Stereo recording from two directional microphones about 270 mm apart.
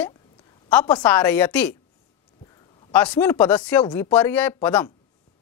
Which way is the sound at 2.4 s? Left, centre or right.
Centre.